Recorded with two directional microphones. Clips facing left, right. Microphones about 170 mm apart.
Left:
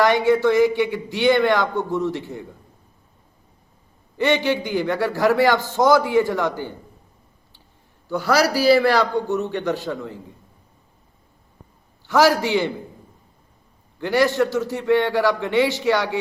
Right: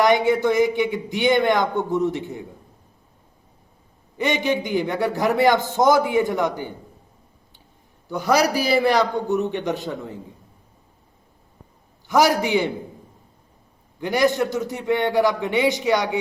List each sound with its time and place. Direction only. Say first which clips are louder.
0.0 s a man's voice: left 1 dB; 20° right (ahead or behind)
4.2 s a man's voice: left 2 dB; 20° right (ahead or behind)
8.1 s a man's voice: even; 15° right (ahead or behind)
12.0 s a man's voice: left 1 dB; 15° right (ahead or behind)
14.0 s a man's voice: left 1 dB; 15° right (ahead or behind)